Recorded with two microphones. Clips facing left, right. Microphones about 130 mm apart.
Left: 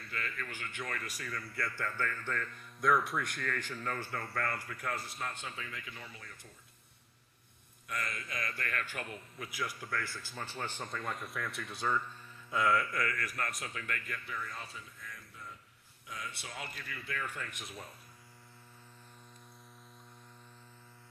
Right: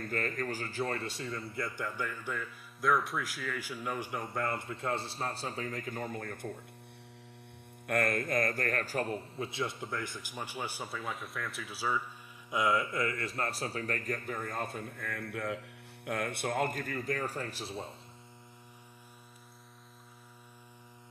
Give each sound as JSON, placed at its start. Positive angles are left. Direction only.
{"t": 0.0, "sound": "a man's voice", "side_deg": -45}
{"t": 7.8, "sound": "a man's voice", "side_deg": -55}